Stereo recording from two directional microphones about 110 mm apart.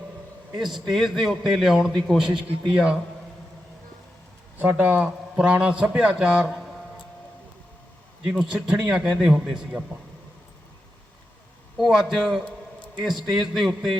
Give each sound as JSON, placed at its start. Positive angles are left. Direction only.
{"t": 0.5, "sound": "a man's voice", "side_deg": 0}
{"t": 2.3, "sound": "a man's voice", "side_deg": -50}
{"t": 4.6, "sound": "a man's voice", "side_deg": -20}
{"t": 6.6, "sound": "music", "side_deg": 5}
{"t": 8.3, "sound": "a man's voice", "side_deg": -5}
{"t": 11.8, "sound": "a man's voice", "side_deg": 0}